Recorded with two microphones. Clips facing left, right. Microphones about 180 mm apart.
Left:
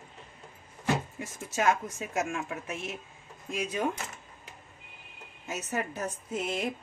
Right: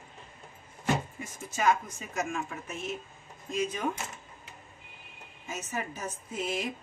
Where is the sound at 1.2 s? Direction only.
75° left (ahead or behind).